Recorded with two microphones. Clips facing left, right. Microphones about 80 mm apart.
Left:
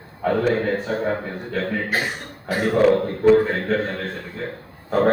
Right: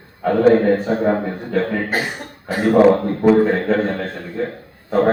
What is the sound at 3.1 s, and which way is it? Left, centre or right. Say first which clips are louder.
A man's voice: right 2 dB; centre.